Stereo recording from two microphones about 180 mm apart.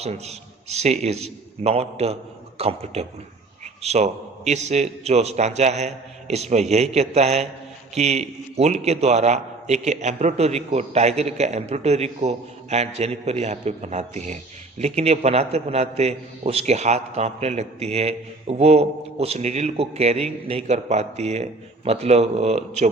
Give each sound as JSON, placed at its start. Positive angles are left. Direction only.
{"t": 0.0, "sound": "a man's voice", "side_deg": -35}